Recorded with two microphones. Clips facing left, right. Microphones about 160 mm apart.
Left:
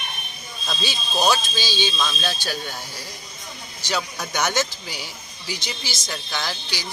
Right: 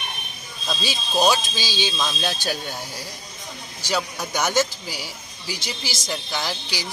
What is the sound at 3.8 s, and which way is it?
Speech, 5° right (ahead or behind).